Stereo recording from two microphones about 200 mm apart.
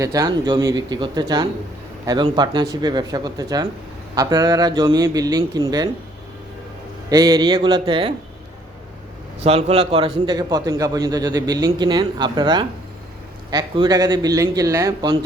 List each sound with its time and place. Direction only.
0.0 s a man's voice: 20° right (ahead or behind)
7.1 s a man's voice: 20° right (ahead or behind)
9.4 s a man's voice: 30° right (ahead or behind); by 15.1 s 15° right (ahead or behind)